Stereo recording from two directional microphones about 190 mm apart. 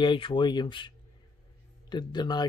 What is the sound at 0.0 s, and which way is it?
Speech, 25° left (ahead or behind).